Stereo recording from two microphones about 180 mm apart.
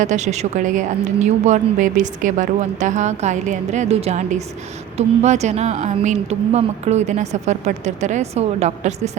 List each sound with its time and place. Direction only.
0.0 s a woman's voice: 40° right (ahead or behind)